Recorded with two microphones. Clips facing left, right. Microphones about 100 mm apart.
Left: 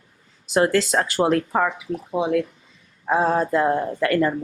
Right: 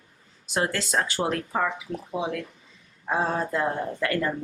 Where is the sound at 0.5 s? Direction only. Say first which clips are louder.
Left 7 dB; 55° left (ahead or behind).